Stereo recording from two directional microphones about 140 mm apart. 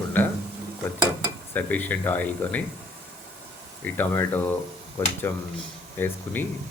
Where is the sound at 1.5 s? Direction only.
10° left (ahead or behind).